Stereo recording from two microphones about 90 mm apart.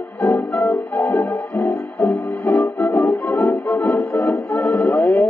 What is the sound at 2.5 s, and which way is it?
Music, 30° left (ahead or behind).